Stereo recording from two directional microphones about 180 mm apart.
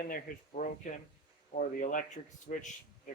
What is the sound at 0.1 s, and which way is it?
Speech, 50° left (ahead or behind).